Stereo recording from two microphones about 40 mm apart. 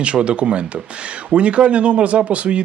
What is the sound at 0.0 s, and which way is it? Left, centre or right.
Speech, right.